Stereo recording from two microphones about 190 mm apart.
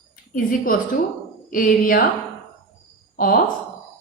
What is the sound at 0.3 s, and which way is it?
A woman's voice, 50° left (ahead or behind).